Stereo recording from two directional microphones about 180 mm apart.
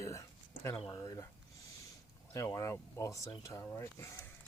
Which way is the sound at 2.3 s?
15° left (ahead or behind).